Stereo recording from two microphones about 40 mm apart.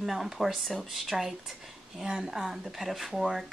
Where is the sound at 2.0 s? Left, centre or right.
Centre.